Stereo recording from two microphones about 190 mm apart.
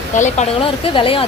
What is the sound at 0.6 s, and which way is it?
Speech, 25° left (ahead or behind).